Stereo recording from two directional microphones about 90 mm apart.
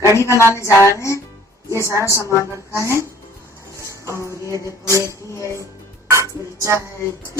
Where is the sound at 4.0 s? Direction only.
35° left (ahead or behind).